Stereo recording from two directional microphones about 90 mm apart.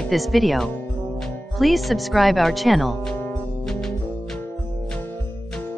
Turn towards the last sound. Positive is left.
turn(degrees=5)  # may be behind; listen again after turning